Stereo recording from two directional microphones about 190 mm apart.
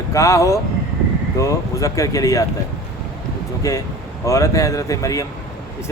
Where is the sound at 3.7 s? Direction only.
15° left (ahead or behind).